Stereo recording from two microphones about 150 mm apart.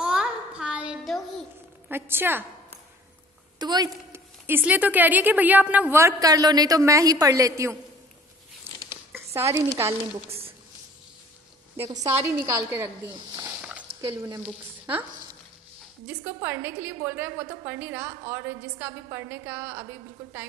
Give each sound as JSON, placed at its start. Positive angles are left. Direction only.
{"t": 0.0, "sound": "a sound", "side_deg": -5}
{"t": 1.9, "sound": "a woman's voice", "side_deg": -15}
{"t": 3.5, "sound": "a woman's voice", "side_deg": -30}
{"t": 4.1, "sound": "a woman's voice", "side_deg": -15}
{"t": 9.1, "sound": "a sound", "side_deg": -20}
{"t": 9.8, "sound": "a woman's voice", "side_deg": -20}
{"t": 11.7, "sound": "a woman's voice", "side_deg": -20}
{"t": 13.4, "sound": "a sound", "side_deg": -10}
{"t": 14.2, "sound": "a woman's voice", "side_deg": -15}
{"t": 16.1, "sound": "a woman's voice", "side_deg": -15}